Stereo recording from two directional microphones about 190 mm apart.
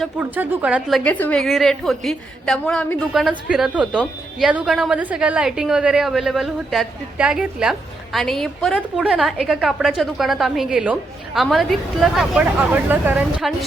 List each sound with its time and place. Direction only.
0.0 s a woman's voice: 10° right (ahead or behind)